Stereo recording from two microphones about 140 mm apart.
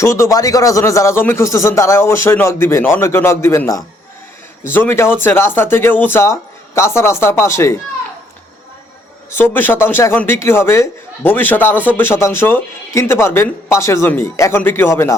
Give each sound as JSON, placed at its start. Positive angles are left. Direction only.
{"t": 0.0, "sound": "a man's voice", "side_deg": 20}
{"t": 9.3, "sound": "a man's voice", "side_deg": 15}